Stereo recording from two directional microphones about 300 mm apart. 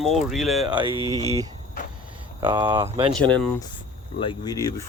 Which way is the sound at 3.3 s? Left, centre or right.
Centre.